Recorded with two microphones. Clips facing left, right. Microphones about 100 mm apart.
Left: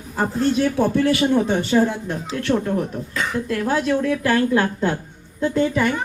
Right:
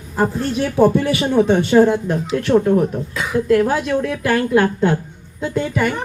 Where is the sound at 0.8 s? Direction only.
10° right (ahead or behind).